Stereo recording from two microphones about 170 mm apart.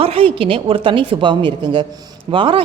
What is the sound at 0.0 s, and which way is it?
A woman's voice, 35° right (ahead or behind).